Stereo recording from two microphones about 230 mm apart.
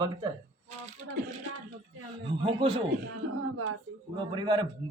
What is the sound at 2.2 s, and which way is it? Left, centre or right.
Speech, right.